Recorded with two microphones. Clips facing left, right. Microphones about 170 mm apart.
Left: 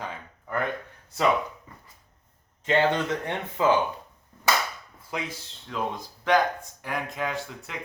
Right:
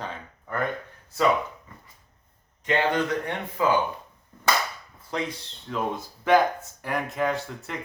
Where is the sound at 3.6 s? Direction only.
25° left (ahead or behind).